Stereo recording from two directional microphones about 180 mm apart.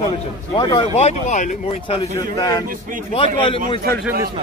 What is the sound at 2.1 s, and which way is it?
Speech, 20° left (ahead or behind).